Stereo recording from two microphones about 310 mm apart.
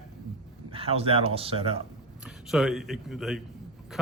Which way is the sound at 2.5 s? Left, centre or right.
Centre.